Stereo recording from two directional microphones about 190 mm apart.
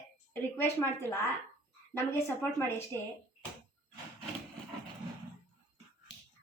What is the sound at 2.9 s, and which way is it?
Speech, 20° right (ahead or behind).